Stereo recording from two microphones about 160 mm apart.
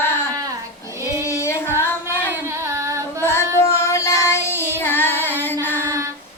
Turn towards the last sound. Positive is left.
turn(degrees=10)  # may be behind; listen again after turning